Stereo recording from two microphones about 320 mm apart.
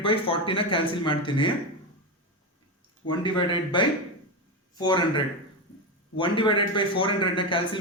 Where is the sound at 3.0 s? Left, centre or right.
Centre.